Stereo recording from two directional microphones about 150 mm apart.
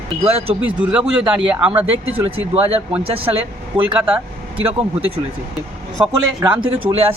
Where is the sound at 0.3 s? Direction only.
40° right (ahead or behind).